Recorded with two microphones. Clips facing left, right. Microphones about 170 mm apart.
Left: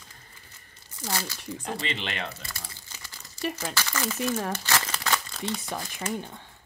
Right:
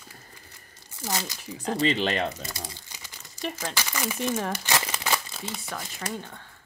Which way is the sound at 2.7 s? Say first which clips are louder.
Right 3 dB; 15° right (ahead or behind).